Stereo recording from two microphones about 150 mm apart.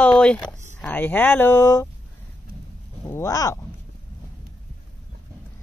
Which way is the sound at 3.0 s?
20° left (ahead or behind).